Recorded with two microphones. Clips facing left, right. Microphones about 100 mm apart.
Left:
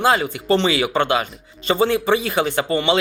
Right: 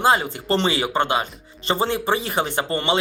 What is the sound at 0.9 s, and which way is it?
Speech, 20° right (ahead or behind).